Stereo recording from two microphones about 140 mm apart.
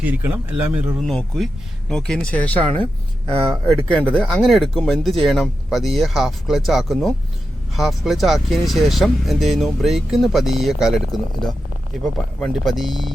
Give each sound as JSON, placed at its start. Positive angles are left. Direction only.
{"t": 0.0, "sound": "speech", "side_deg": -10}
{"t": 0.9, "sound": "speech", "side_deg": 5}
{"t": 3.2, "sound": "speech", "side_deg": -25}
{"t": 4.1, "sound": "speech", "side_deg": 5}